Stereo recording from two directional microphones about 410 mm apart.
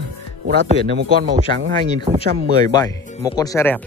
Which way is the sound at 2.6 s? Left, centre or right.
Centre.